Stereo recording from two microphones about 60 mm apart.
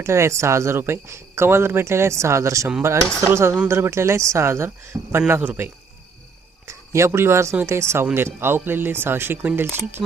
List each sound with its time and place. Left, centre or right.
0.0 s speech: right
5.4 s speech: right
6.7 s speech: right